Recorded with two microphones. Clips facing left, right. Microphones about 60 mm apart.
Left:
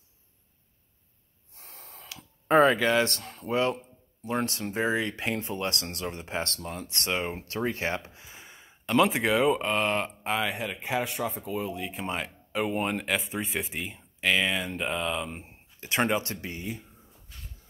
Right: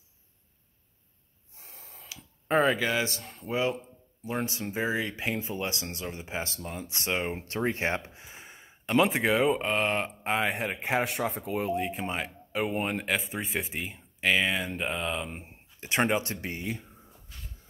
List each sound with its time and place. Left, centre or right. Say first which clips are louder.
1.6 s speech: left 3 dB; centre
7.2 s speech: right 1 dB; right
10.5 s speech: right 2 dB; right
11.7 s speech: right 6 dB; right
12.0 s speech: even; centre
15.4 s speech: right 1 dB; centre
16.5 s speech: right 2 dB; right